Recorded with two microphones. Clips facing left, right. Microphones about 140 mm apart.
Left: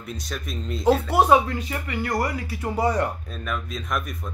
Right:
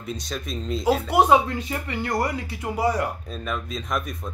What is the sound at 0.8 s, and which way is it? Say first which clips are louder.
Speech: left 1 dB; 15° right (ahead or behind).